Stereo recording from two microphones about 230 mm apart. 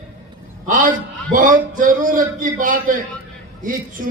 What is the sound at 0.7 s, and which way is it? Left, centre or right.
A man's voice, right.